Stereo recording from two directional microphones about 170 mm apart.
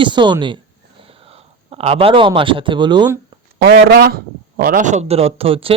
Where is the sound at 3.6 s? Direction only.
75° right (ahead or behind).